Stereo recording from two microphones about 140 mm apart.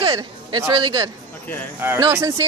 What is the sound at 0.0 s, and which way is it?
Speech, 25° right (ahead or behind).